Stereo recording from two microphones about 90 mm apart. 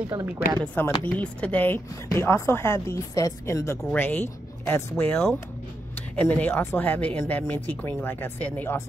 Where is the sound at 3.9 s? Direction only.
20° left (ahead or behind).